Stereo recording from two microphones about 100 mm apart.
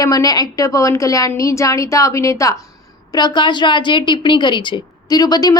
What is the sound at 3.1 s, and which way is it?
A woman's voice, 50° left (ahead or behind).